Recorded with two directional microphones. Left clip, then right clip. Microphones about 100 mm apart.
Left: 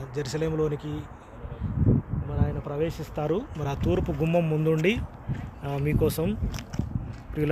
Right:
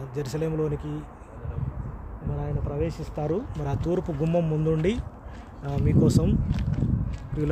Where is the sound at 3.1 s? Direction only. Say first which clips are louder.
Left 1 dB; 15° left (ahead or behind).